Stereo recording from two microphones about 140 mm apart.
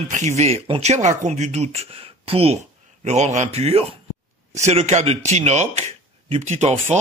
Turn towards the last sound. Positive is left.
turn(degrees=-55)  # may be behind; listen again after turning